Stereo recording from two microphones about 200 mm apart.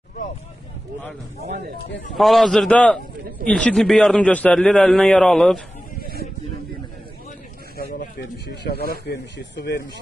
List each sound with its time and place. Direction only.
2.1 s a man's voice: centre (ahead or behind)
7.7 s snake: 50° left (ahead or behind)
9.0 s speech: 55° left (ahead or behind)